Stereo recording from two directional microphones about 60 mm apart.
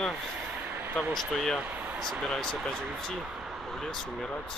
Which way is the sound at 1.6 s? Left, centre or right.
Right.